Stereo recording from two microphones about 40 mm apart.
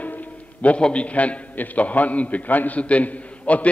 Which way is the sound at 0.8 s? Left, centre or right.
Left.